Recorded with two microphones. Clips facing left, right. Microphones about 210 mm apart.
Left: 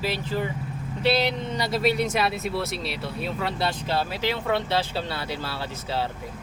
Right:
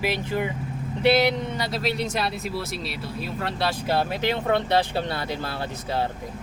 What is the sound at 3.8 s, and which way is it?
Speech, 50° right (ahead or behind).